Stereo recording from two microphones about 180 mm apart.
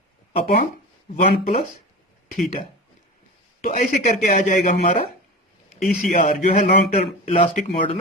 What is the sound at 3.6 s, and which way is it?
A man's voice, 50° left (ahead or behind).